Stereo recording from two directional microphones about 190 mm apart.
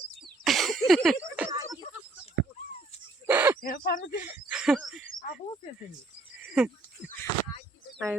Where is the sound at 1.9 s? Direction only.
40° left (ahead or behind).